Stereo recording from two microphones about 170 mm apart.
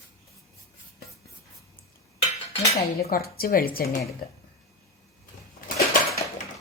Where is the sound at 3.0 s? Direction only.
60° left (ahead or behind).